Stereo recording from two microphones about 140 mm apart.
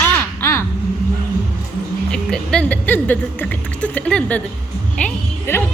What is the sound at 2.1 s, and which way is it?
A woman's voice, 5° left (ahead or behind).